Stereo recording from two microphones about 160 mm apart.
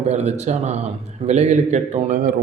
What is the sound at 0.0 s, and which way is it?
A man's voice, 45° right (ahead or behind).